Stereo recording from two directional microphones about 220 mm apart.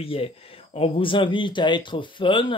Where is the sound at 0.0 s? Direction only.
25° left (ahead or behind).